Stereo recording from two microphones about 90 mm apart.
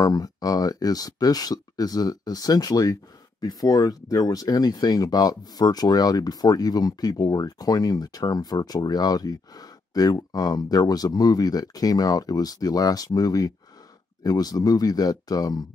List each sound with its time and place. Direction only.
0.0 s speech: 45° left (ahead or behind)